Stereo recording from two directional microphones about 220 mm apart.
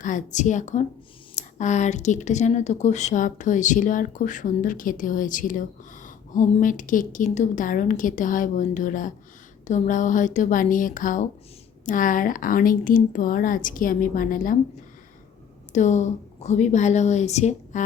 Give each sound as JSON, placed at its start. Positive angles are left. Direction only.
{"t": 0.0, "sound": "speech", "side_deg": 35}
{"t": 15.7, "sound": "speech", "side_deg": 35}